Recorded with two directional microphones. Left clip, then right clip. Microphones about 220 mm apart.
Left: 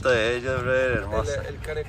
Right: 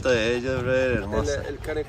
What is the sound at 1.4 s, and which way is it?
Speech, 40° right (ahead or behind).